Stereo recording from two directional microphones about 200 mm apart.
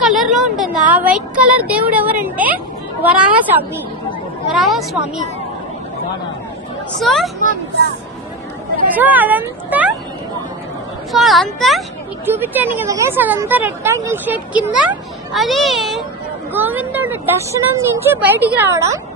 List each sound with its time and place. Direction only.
0.0 s a woman's voice: centre (ahead or behind)
4.4 s a woman's voice: centre (ahead or behind)
7.0 s a woman's voice: centre (ahead or behind)
9.0 s speech: 10° right (ahead or behind)
11.1 s a woman's voice: centre (ahead or behind)
12.2 s speech: 10° right (ahead or behind)